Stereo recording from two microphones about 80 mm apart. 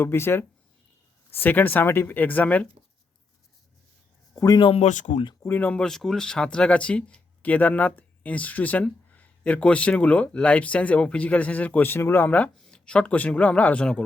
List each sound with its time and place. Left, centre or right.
0.0 s speech: left
4.4 s speech: left
5.5 s speech: centre
5.8 s speech: centre; by 12.5 s left
12.5 s speech: centre